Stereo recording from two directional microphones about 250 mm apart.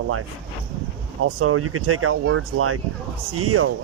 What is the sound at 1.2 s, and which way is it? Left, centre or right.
Speech, right.